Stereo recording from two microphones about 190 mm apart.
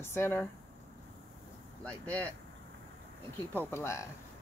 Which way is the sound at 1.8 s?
5° left (ahead or behind).